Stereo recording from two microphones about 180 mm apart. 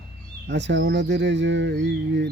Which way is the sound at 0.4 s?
80° right.